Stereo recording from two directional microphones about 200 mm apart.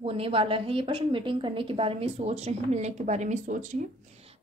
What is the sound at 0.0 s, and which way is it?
A woman's voice, 30° right (ahead or behind).